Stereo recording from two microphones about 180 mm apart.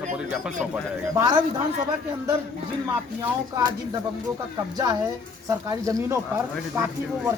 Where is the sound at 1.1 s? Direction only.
25° right (ahead or behind).